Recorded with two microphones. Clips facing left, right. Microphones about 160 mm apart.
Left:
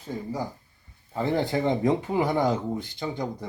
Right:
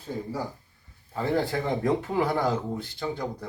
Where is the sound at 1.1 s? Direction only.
20° left (ahead or behind).